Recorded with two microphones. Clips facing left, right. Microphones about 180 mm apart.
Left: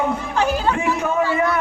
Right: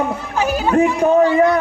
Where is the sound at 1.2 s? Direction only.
20° right (ahead or behind).